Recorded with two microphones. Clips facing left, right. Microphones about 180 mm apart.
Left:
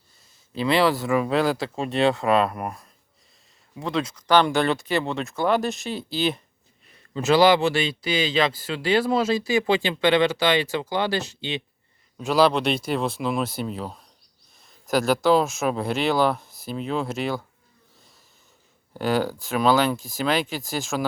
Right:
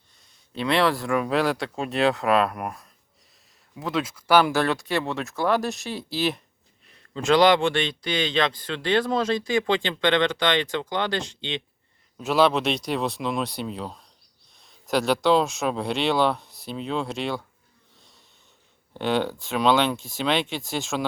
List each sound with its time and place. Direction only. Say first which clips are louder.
0.5 s a man's voice: left 2 dB; centre (ahead or behind)
18.9 s speech: left 1 dB; centre (ahead or behind)